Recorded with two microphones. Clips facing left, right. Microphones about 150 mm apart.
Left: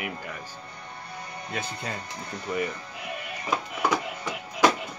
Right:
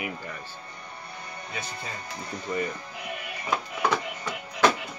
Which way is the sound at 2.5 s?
10° left (ahead or behind).